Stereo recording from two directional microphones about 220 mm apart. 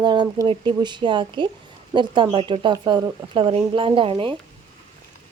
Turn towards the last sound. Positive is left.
turn(degrees=-25)  # may be behind; listen again after turning